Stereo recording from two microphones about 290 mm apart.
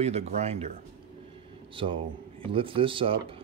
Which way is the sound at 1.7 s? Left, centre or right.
Centre.